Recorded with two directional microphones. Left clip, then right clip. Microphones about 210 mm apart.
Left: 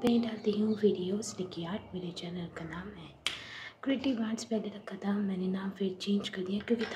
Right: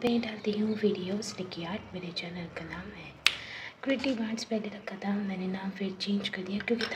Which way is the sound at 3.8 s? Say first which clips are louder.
Right 2 dB; 15° left (ahead or behind).